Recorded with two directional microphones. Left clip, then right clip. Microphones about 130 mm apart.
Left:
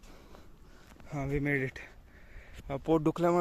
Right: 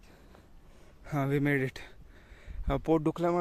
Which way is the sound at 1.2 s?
70° right (ahead or behind).